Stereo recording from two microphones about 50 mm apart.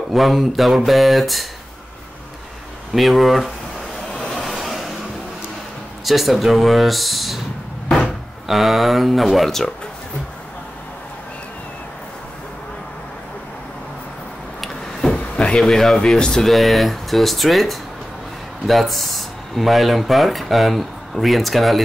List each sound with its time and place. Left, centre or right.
0.1 s speech: centre
2.9 s speech: centre
4.2 s vehicle: centre
6.0 s speech: centre
15.3 s a sound: centre
15.6 s speech: centre